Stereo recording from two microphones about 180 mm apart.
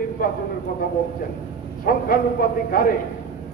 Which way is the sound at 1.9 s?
55° left (ahead or behind).